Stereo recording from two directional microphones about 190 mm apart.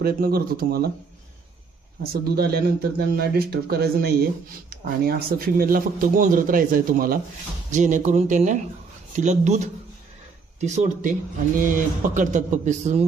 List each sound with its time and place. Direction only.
0.0 s speech: 50° right (ahead or behind)
2.3 s speech: 55° right (ahead or behind); by 13.0 s 40° right (ahead or behind)